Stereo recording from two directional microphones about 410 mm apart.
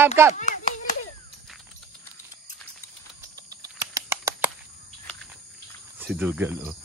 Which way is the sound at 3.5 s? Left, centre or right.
Centre.